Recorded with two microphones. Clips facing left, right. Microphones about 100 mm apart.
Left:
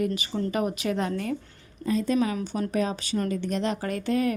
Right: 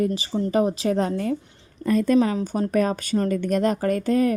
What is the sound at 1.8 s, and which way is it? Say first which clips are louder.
Speech: right 5 dB; 55° right (ahead or behind).